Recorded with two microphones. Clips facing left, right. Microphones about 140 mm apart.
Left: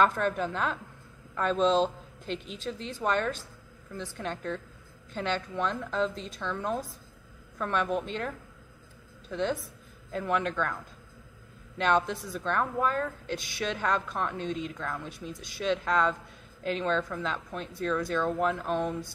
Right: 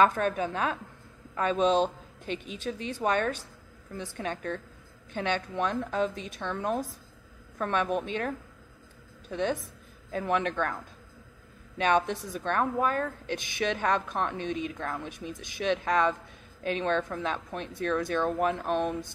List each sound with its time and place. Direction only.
0.1 s a woman's voice: 15° right (ahead or behind)
5.1 s a woman's voice: 15° right (ahead or behind)
9.3 s a woman's voice: 15° right (ahead or behind)
11.8 s a woman's voice: 15° right (ahead or behind)